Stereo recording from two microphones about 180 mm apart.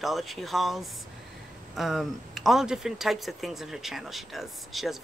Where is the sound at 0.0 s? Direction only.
Centre (ahead or behind).